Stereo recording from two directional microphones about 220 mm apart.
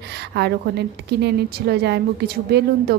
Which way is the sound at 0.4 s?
50° right (ahead or behind).